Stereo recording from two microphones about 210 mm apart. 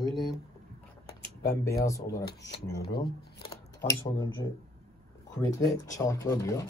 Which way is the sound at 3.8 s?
15° left (ahead or behind).